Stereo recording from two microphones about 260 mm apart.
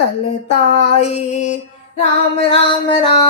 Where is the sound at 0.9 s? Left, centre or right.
Left.